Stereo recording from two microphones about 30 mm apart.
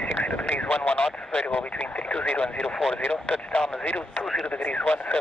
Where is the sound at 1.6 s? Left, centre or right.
Left.